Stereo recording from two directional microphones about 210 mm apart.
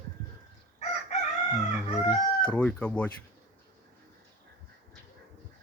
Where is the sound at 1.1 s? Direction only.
30° left (ahead or behind).